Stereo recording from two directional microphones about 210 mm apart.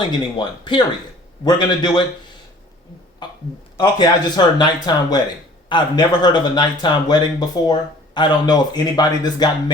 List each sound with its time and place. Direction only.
0.3 s a man's voice: 20° left (ahead or behind)
3.2 s burping: 20° left (ahead or behind)
3.8 s a man's voice: 20° left (ahead or behind)